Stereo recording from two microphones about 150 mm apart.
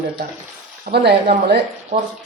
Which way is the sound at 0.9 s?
90° right.